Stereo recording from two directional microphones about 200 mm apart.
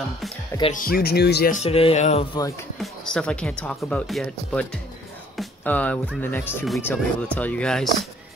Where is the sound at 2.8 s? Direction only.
5° left (ahead or behind).